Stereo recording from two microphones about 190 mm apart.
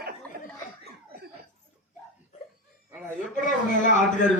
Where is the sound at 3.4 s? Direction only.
40° left (ahead or behind).